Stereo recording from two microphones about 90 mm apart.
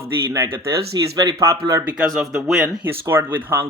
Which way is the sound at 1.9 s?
10° right (ahead or behind).